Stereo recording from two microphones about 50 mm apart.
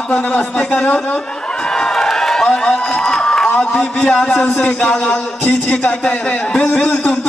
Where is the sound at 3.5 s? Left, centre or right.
Left.